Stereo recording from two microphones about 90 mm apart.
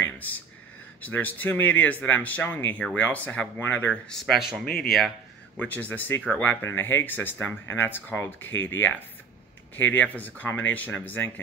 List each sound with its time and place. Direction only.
0.0 s a sound: 20° left (ahead or behind)
1.0 s speech: 20° left (ahead or behind)
4.3 s speech: centre (ahead or behind)
5.6 s speech: 20° left (ahead or behind)